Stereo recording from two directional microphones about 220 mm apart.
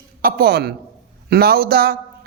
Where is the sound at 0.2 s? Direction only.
45° right (ahead or behind).